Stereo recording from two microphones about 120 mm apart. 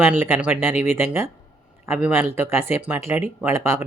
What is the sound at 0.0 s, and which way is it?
Speech, 15° right (ahead or behind).